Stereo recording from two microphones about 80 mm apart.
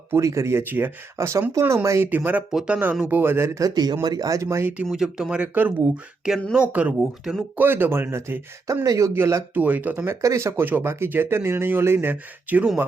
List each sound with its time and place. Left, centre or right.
0.1 s speech: right
1.2 s speech: right
2.0 s speech: right
2.5 s speech: centre; by 3.6 s right
3.6 s speech: right
4.9 s speech: centre; by 9.1 s right
9.1 s speech: right
10.2 s speech: right